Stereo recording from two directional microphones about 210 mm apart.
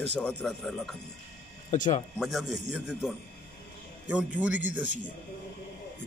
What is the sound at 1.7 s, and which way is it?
Speech, 35° left (ahead or behind).